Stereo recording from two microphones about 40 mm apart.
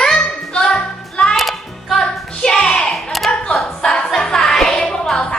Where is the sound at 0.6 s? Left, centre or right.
Left.